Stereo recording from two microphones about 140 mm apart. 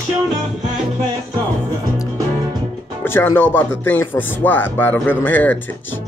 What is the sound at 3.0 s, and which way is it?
Music, 15° left (ahead or behind).